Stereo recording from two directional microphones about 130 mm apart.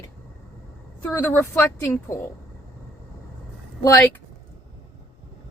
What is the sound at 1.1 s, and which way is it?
Speech, 15° left (ahead or behind).